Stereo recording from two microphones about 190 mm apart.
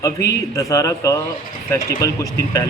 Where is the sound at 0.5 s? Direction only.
15° left (ahead or behind).